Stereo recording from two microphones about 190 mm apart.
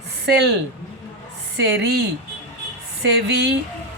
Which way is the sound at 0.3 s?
65° right (ahead or behind).